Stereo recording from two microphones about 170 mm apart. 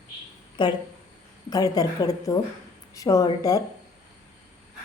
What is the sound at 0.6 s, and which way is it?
A woman's voice, 25° left (ahead or behind).